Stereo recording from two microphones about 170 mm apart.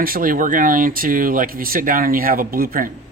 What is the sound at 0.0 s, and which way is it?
Speech, 55° right (ahead or behind).